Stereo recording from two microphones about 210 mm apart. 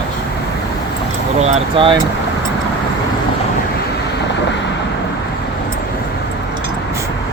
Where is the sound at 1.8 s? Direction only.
25° right (ahead or behind).